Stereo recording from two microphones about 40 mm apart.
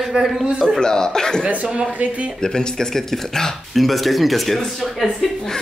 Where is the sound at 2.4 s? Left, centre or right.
Centre.